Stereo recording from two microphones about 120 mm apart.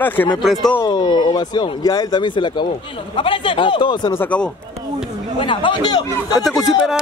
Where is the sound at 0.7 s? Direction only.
35° left (ahead or behind).